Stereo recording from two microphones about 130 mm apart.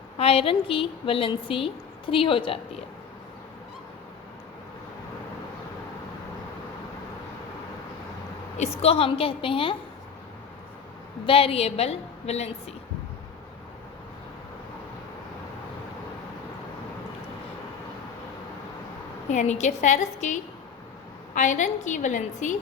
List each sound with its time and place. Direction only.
0.2 s a woman's voice: 50° left (ahead or behind)
8.8 s a woman's voice: 45° left (ahead or behind)
11.3 s a woman's voice: 45° left (ahead or behind)
19.3 s a woman's voice: 65° left (ahead or behind)